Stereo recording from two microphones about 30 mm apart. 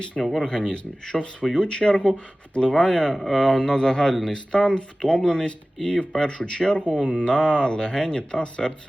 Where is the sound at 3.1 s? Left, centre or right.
Centre.